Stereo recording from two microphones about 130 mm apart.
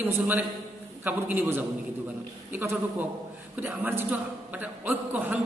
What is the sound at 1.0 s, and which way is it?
A man's voice, 15° right (ahead or behind).